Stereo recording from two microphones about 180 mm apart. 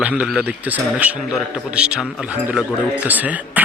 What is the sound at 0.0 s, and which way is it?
A man's voice, 5° right (ahead or behind).